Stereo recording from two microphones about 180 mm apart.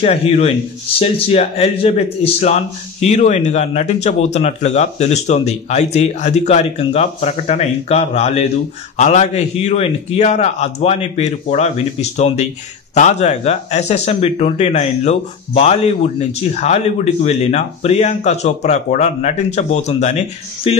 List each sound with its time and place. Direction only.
0.0 s a man's voice: 35° left (ahead or behind)